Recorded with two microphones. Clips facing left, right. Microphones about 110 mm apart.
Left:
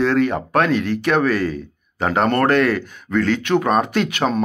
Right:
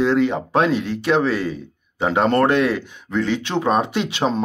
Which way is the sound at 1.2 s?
20° right (ahead or behind).